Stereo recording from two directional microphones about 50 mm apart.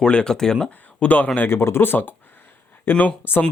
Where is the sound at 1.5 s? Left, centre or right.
Left.